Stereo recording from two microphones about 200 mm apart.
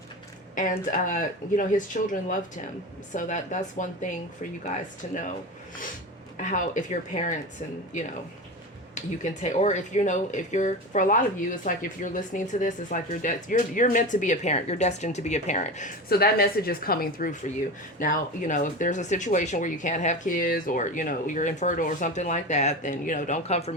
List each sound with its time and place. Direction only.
0.5 s speech: 40° left (ahead or behind)
6.3 s speech: 40° left (ahead or behind)
9.0 s speech: 35° left (ahead or behind)